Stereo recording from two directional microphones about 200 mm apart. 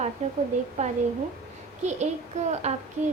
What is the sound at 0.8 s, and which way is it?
Speech, 35° right (ahead or behind).